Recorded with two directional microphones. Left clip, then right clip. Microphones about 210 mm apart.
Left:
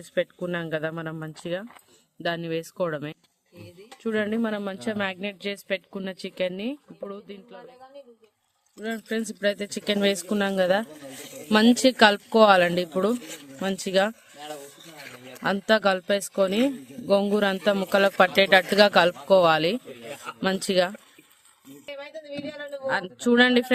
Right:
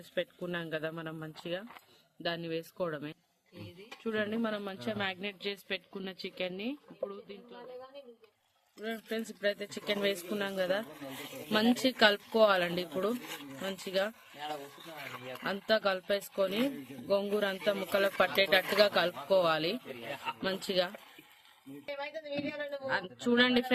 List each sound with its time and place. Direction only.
0.1 s speech: 50° left (ahead or behind)
8.8 s speech: 50° left (ahead or behind)
14.9 s a sound: centre (ahead or behind)
15.4 s speech: 55° left (ahead or behind)
22.3 s speech: 50° left (ahead or behind)